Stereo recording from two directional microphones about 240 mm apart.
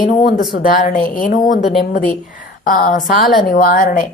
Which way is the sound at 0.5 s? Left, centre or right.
Left.